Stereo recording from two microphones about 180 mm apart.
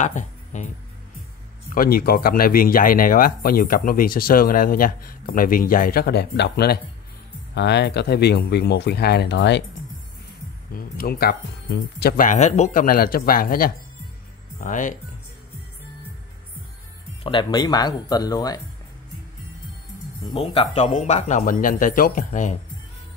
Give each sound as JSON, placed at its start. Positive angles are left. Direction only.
{"t": 0.0, "sound": "speech", "side_deg": 40}
{"t": 1.7, "sound": "speech", "side_deg": 55}
{"t": 10.7, "sound": "speech", "side_deg": 55}
{"t": 17.2, "sound": "speech", "side_deg": 30}
{"t": 20.3, "sound": "speech", "side_deg": 35}